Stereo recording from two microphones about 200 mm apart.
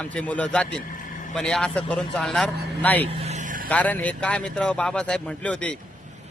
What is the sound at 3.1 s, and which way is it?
Vehicle, 30° right (ahead or behind).